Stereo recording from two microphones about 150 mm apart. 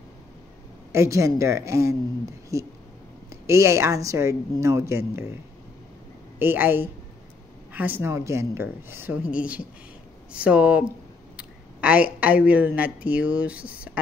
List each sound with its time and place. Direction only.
0.9 s a woman's voice: 20° right (ahead or behind)
6.4 s speech: 15° right (ahead or behind)